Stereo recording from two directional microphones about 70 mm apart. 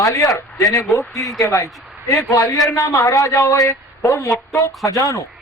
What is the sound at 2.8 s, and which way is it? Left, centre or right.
A man's voice, left.